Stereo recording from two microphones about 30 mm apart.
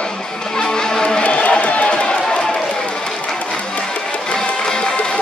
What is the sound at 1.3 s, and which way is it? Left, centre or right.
Run, left.